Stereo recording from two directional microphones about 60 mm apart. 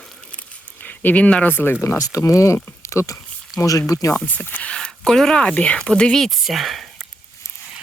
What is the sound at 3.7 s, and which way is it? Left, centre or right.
Speech, left.